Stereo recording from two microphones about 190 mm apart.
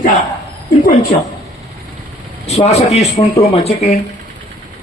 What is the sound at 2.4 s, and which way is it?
Speech, 35° left (ahead or behind).